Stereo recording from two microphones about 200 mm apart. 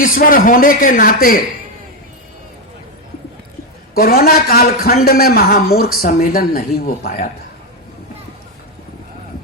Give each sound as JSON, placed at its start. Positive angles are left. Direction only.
{"t": 0.0, "sound": "speech", "side_deg": 45}
{"t": 3.9, "sound": "speech", "side_deg": 50}